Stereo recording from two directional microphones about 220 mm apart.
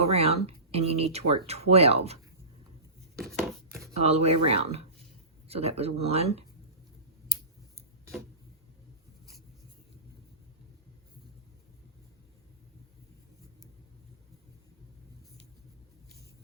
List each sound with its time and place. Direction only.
0.0 s speech: 30° right (ahead or behind)
3.9 s speech: 30° right (ahead or behind)